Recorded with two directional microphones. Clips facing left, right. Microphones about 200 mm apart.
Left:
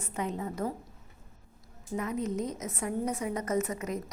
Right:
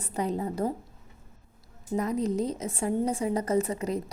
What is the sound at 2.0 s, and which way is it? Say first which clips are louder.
A woman's voice: right 5 dB; 35° right (ahead or behind).